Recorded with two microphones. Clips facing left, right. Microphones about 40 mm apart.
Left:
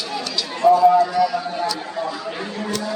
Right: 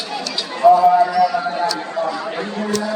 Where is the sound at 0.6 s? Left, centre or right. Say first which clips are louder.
Right 2 dB; centre.